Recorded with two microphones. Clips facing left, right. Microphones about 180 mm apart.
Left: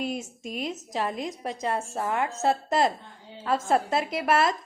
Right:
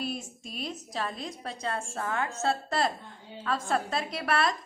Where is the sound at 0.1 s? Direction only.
20° left (ahead or behind).